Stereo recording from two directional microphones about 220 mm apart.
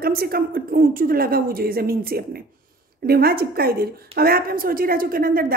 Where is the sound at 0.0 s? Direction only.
45° right (ahead or behind).